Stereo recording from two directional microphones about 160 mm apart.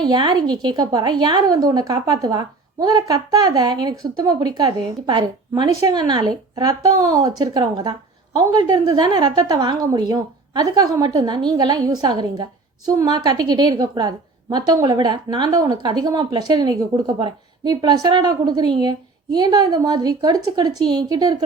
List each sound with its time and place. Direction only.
0.0 s a woman's voice: 25° right (ahead or behind)